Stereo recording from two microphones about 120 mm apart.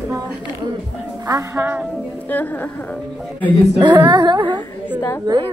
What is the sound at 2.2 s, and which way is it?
Speech, 15° left (ahead or behind).